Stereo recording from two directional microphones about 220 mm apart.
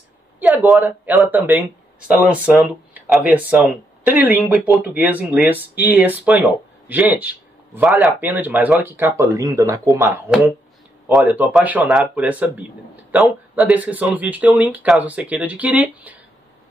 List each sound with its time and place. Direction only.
0.4 s speech: 5° right (ahead or behind)